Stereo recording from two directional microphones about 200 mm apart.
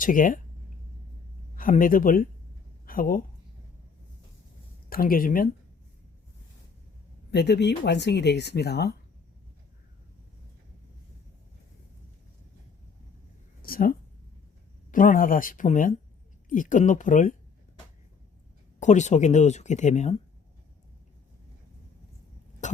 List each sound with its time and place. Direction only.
0.0 s speech: 40° left (ahead or behind)
1.5 s a woman's voice: 45° left (ahead or behind)
4.9 s speech: 45° left (ahead or behind)
7.3 s speech: 55° left (ahead or behind)
13.6 s a sound: 45° left (ahead or behind)
14.9 s speech: 40° left (ahead or behind)
18.8 s speech: 35° left (ahead or behind)